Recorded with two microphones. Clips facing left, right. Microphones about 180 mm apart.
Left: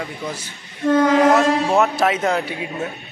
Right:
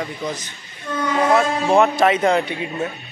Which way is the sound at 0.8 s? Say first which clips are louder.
Left 7 dB; 90° left.